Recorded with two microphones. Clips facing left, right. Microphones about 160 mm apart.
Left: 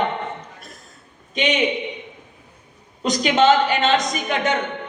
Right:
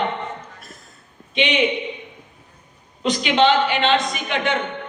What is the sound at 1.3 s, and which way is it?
Speech, 40° left (ahead or behind).